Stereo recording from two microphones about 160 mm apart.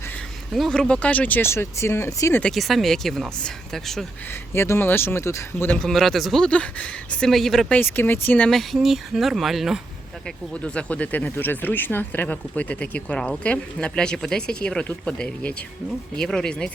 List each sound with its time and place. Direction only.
0.5 s speech: centre (ahead or behind); by 2.4 s 20° left (ahead or behind)
2.4 s speech: centre (ahead or behind)
4.5 s speech: 15° left (ahead or behind)
5.8 s speech: centre (ahead or behind)
7.8 s speech: 10° left (ahead or behind)
8.4 s speech: centre (ahead or behind)